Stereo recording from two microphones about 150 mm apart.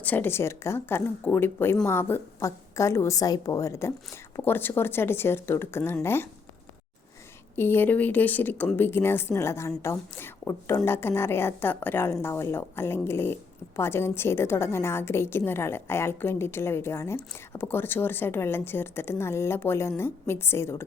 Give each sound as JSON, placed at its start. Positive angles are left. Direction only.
{"t": 0.0, "sound": "speech", "side_deg": 10}
{"t": 7.5, "sound": "speech", "side_deg": 15}